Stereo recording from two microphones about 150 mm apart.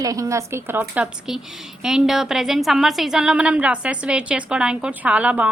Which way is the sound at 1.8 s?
Centre (ahead or behind).